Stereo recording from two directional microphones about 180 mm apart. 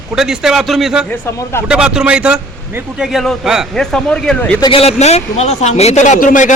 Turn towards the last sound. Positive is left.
turn(degrees=45)  # may be behind; listen again after turning